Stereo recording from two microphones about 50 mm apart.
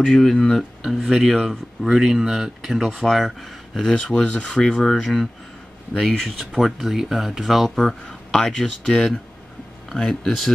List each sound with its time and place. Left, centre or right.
0.0 s speech: centre
1.0 s speech: centre
3.9 s speech: left; by 7.7 s centre
7.7 s speech: centre